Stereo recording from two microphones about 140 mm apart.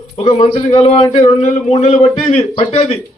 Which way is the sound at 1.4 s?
60° left (ahead or behind).